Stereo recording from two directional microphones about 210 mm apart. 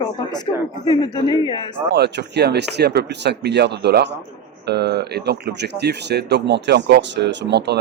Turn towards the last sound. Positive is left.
turn(degrees=-55)  # may be behind; listen again after turning